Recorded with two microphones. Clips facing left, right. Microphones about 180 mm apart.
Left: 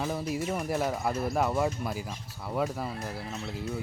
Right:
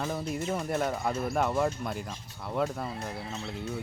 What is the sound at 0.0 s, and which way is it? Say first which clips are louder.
Speech: left 1 dB; 5° left (ahead or behind).